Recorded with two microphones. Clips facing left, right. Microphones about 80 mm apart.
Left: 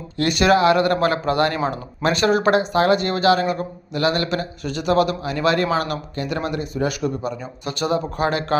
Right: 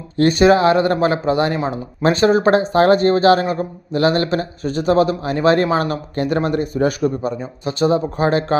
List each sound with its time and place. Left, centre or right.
0.2 s speech: right
7.6 s speech: right